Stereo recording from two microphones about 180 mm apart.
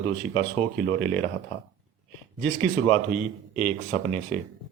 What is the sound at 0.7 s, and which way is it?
Speech, 10° left (ahead or behind).